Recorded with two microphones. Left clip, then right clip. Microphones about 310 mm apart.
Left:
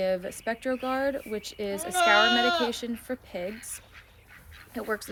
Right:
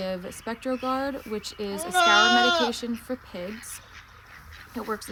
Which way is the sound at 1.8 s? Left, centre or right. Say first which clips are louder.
Right 2 dB; right.